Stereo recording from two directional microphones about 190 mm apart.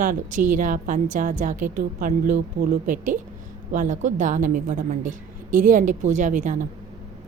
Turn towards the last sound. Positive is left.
turn(degrees=-40)  # may be behind; listen again after turning